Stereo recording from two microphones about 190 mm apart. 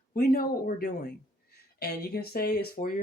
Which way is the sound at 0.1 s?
50° left (ahead or behind).